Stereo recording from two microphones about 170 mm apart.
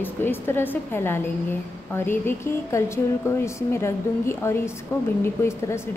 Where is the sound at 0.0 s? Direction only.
10° left (ahead or behind).